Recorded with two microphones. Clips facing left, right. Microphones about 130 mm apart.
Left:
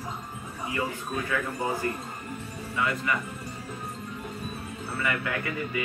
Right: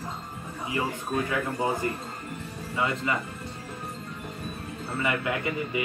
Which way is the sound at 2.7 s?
25° right (ahead or behind).